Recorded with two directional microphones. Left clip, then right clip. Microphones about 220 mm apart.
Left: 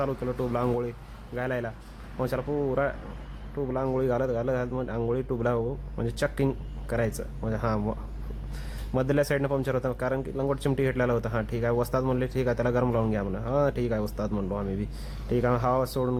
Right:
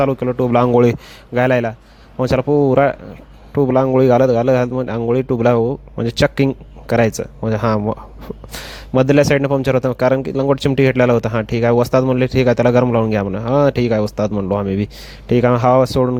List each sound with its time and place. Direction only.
0.0 s speech: 35° right (ahead or behind)